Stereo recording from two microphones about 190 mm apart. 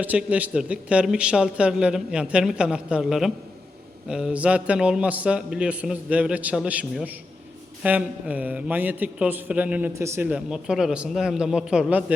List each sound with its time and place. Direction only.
0.0 s a man's voice: 5° right (ahead or behind)